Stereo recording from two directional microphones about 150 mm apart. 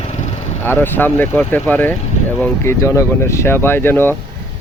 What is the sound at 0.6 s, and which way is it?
Speech, 15° left (ahead or behind).